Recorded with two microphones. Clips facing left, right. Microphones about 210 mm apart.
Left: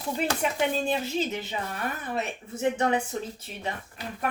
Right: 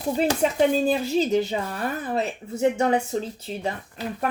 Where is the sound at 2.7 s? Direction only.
30° right (ahead or behind).